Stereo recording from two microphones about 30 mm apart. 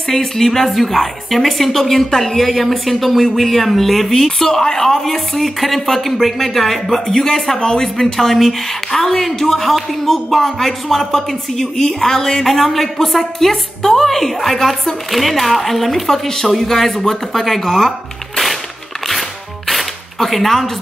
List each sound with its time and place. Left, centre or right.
0.1 s a woman's voice: centre
7.5 s speech: left
7.8 s speech: centre
12.4 s a woman's voice: centre
19.7 s a sound: centre